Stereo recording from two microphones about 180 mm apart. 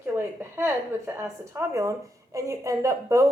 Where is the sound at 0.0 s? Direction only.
15° right (ahead or behind).